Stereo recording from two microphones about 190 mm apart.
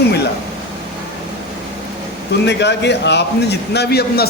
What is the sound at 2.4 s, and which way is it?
A man's voice, 65° left (ahead or behind).